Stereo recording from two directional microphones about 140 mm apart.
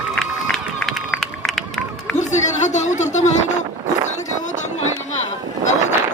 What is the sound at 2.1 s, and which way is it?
Speech, 60° left (ahead or behind).